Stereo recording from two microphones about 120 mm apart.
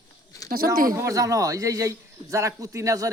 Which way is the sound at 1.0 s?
25° right (ahead or behind).